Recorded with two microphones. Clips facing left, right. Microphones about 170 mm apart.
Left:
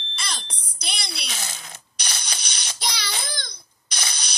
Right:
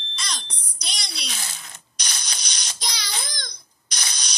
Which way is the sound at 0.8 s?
55° left (ahead or behind).